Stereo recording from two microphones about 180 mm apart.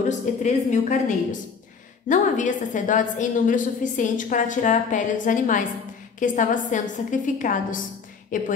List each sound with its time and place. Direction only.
0.1 s a woman's voice: 40° left (ahead or behind)